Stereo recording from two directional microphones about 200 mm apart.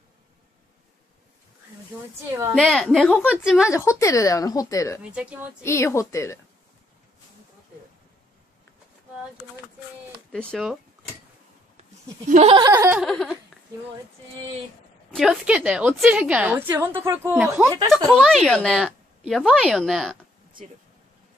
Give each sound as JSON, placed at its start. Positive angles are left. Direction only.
{"t": 2.5, "sound": "speech", "side_deg": 0}
{"t": 3.7, "sound": "speech", "side_deg": 15}
{"t": 10.3, "sound": "speech", "side_deg": 0}
{"t": 12.3, "sound": "laughter", "side_deg": -35}
{"t": 12.5, "sound": "a woman's voice", "side_deg": -15}
{"t": 13.0, "sound": "speech", "side_deg": 0}
{"t": 15.0, "sound": "a woman's voice", "side_deg": 0}